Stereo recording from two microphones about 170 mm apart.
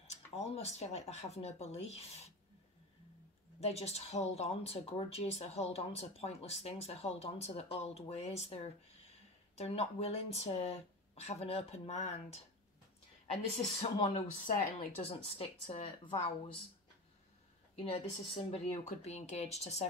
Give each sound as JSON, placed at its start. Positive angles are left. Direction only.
{"t": 0.0, "sound": "a woman's voice", "side_deg": 40}
{"t": 3.6, "sound": "a woman's voice", "side_deg": 40}
{"t": 13.7, "sound": "a woman's voice", "side_deg": 35}
{"t": 14.2, "sound": "speech", "side_deg": 50}
{"t": 15.0, "sound": "a woman's voice", "side_deg": 35}
{"t": 17.7, "sound": "a woman's voice", "side_deg": 35}